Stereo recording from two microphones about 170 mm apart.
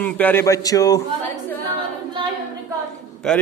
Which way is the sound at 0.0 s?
10° left (ahead or behind).